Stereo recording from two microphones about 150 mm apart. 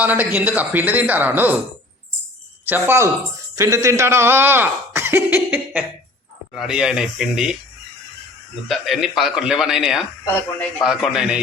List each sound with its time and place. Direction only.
0.0 s speech: 10° right (ahead or behind)
2.6 s a man's voice: 15° right (ahead or behind)
8.6 s a man's voice: centre (ahead or behind)